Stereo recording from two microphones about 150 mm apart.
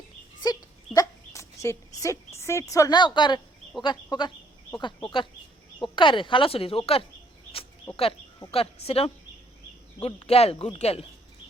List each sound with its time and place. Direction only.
0.9 s speech: 20° left (ahead or behind); by 7.0 s 40° left (ahead or behind)
7.5 s a sound: 40° left (ahead or behind)
8.4 s speech: 40° left (ahead or behind)